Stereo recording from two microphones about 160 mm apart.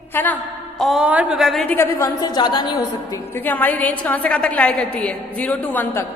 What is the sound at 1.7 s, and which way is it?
Speech, 15° left (ahead or behind).